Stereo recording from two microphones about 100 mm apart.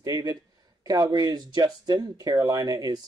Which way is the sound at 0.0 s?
40° right (ahead or behind).